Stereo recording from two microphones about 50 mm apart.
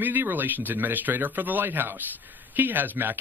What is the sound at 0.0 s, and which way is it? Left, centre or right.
A man's voice, right.